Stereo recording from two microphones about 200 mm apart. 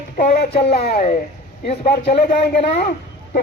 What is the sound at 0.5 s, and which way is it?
A man's voice, 30° left (ahead or behind).